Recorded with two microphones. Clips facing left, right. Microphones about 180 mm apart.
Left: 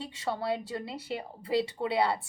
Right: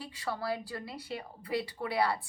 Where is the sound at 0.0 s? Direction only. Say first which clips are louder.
Left 3 dB; 25° left (ahead or behind).